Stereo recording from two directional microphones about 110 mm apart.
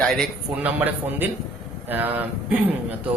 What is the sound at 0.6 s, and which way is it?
A man's voice, 15° right (ahead or behind).